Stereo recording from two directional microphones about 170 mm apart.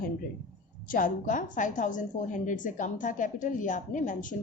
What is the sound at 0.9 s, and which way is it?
A woman's voice, 55° left (ahead or behind).